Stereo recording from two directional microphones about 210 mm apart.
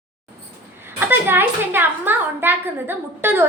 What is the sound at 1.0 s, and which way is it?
A woman's voice, 10° right (ahead or behind).